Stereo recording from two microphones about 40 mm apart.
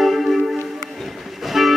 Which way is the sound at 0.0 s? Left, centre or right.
Centre.